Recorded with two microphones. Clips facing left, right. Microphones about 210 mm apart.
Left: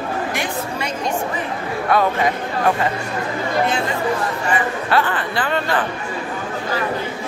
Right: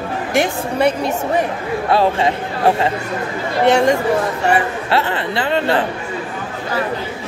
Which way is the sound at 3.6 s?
75° right (ahead or behind).